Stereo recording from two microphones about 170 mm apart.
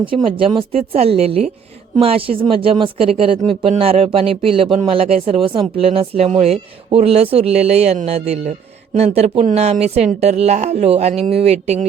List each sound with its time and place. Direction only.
0.0 s speech: 30° right (ahead or behind)